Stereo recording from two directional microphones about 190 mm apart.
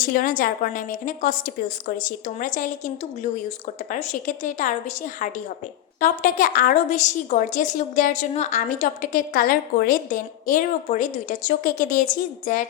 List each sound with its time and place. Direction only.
0.1 s a woman's voice: 45° left (ahead or behind)